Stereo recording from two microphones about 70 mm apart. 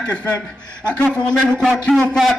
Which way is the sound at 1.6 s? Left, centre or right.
Centre.